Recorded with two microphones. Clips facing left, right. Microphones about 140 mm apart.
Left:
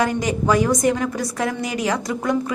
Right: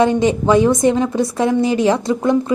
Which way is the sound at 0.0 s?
25° right (ahead or behind).